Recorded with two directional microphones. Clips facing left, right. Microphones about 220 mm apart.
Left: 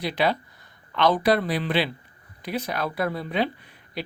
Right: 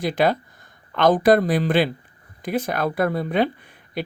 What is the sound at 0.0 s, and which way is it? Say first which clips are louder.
Speech: right 4 dB; 45° right (ahead or behind).